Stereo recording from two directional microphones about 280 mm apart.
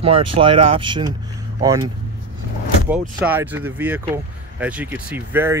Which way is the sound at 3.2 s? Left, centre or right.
Centre.